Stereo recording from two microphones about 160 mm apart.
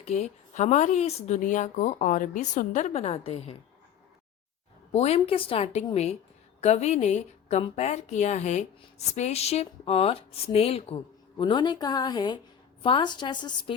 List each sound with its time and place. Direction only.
0.0 s speech: 40° left (ahead or behind)
4.9 s a woman's voice: 40° left (ahead or behind)